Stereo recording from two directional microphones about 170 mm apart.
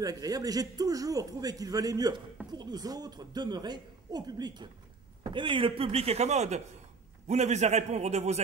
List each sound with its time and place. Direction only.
0.0 s a man's voice: 20° right (ahead or behind); by 8.4 s 40° right (ahead or behind)